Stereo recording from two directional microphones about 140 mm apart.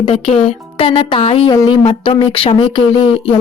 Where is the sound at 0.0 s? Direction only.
40° left (ahead or behind).